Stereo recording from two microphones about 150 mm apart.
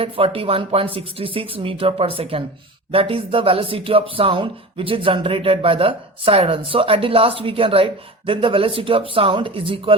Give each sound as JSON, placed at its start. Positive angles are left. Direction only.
{"t": 0.0, "sound": "speech", "side_deg": -40}